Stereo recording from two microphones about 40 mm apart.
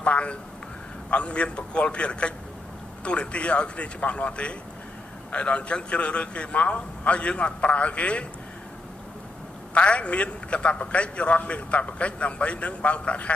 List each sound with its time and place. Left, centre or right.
0.0 s a man's voice: left
9.8 s a man's voice: left